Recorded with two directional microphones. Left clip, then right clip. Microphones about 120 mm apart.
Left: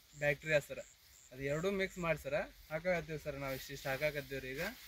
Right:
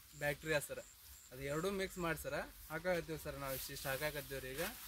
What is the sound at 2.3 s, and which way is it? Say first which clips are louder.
Speech: left 5 dB; 25° right (ahead or behind).